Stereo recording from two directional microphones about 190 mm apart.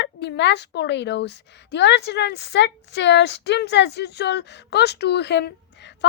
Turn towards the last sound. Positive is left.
turn(degrees=65)  # may be behind; listen again after turning